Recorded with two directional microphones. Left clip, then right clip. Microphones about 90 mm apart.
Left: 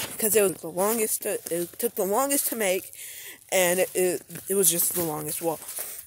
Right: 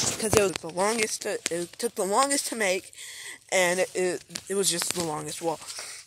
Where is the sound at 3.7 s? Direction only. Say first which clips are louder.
Left 2 dB; 20° left (ahead or behind).